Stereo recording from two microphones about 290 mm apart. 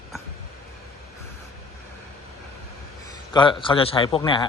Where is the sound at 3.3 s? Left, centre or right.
Centre.